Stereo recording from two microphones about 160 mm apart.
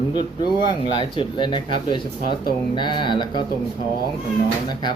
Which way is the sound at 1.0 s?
30° left (ahead or behind).